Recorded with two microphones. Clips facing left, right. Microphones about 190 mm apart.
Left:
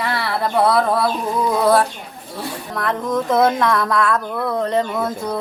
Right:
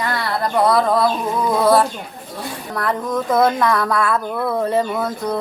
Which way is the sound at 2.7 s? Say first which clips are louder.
Even; centre (ahead or behind).